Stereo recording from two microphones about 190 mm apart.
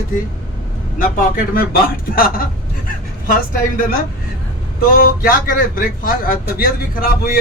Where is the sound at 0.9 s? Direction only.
50° left (ahead or behind).